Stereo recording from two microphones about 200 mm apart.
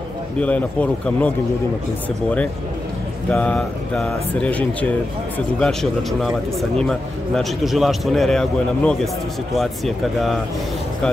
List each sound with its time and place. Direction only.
0.4 s a man's voice: 5° left (ahead or behind)
3.3 s a man's voice: 5° left (ahead or behind)